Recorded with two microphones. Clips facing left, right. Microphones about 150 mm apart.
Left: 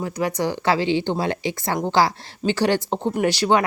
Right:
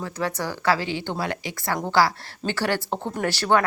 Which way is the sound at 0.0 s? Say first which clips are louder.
Left 5 dB; 15° left (ahead or behind).